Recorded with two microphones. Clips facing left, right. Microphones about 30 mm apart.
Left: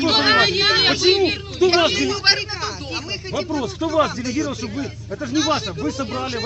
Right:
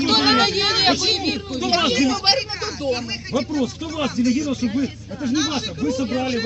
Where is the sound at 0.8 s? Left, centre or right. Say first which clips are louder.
Left 3 dB; left.